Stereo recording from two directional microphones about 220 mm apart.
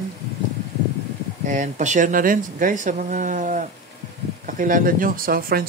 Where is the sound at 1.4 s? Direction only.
35° right (ahead or behind).